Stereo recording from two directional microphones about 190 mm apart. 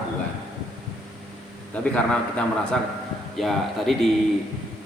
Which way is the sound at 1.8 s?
5° left (ahead or behind).